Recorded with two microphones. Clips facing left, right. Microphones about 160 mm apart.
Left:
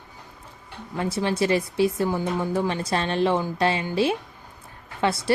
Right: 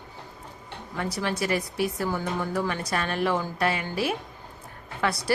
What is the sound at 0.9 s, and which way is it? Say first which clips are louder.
A woman's voice: left 4 dB; 25° left (ahead or behind).